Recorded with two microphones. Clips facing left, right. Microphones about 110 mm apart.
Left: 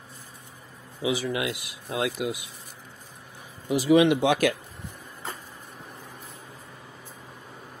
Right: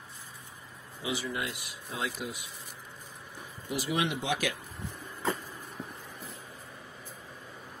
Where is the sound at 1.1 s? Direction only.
90° left; by 2.4 s 75° left (ahead or behind).